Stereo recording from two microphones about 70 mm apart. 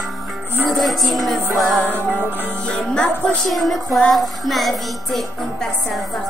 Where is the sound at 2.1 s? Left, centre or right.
Right.